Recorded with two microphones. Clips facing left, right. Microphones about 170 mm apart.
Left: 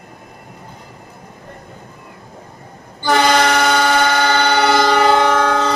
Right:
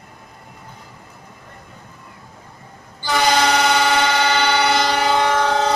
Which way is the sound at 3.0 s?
55° left (ahead or behind).